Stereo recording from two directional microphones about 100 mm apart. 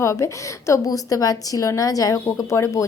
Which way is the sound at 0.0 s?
30° left (ahead or behind).